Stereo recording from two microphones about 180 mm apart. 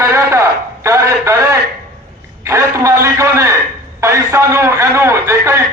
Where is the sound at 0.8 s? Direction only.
15° right (ahead or behind).